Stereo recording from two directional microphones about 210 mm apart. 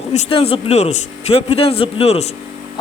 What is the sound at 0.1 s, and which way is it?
A man's voice, 25° left (ahead or behind).